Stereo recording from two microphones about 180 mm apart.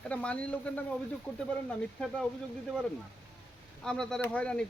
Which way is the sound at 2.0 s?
5° left (ahead or behind).